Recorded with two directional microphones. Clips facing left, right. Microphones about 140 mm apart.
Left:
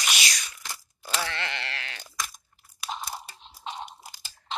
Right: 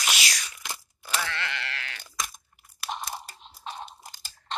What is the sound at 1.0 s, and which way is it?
Bleat, 25° left (ahead or behind).